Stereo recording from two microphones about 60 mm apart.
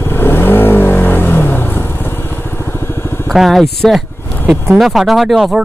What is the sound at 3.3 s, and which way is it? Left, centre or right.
Speech, centre.